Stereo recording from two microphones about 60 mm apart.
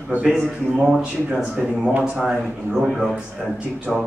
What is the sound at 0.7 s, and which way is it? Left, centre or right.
A man's voice, centre.